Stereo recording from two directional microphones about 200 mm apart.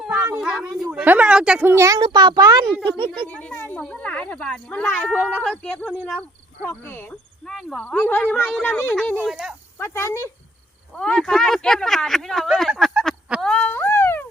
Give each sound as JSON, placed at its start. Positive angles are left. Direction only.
{"t": 0.0, "sound": "cat", "side_deg": 0}
{"t": 0.4, "sound": "speech", "side_deg": 0}
{"t": 3.2, "sound": "speech", "side_deg": 5}
{"t": 9.2, "sound": "speech", "side_deg": -5}
{"t": 9.7, "sound": "speech", "side_deg": 15}
{"t": 10.9, "sound": "a sound", "side_deg": 5}